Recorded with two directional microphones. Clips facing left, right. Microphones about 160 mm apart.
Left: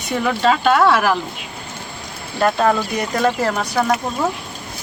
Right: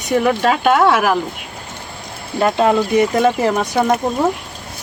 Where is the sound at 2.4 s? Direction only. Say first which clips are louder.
Right 2 dB; 15° right (ahead or behind).